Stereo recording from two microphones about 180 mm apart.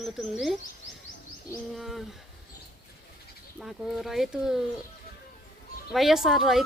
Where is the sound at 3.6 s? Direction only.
Centre (ahead or behind).